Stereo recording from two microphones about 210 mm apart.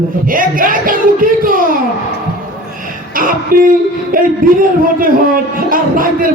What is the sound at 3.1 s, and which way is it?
Speech, 40° right (ahead or behind).